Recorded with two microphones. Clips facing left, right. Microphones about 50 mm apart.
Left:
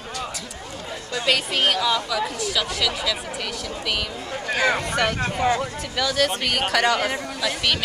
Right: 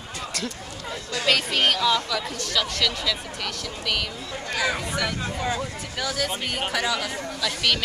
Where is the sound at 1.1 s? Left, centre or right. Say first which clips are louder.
Left 1 dB; centre.